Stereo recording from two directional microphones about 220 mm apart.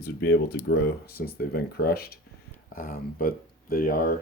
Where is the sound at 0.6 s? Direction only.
10° left (ahead or behind).